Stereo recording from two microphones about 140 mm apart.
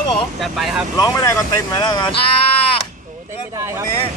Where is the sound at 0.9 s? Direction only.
25° left (ahead or behind).